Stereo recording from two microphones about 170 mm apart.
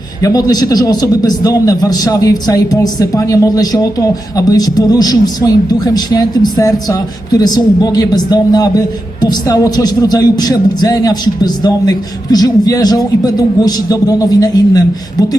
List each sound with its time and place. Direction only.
0.2 s a man's voice: 20° left (ahead or behind)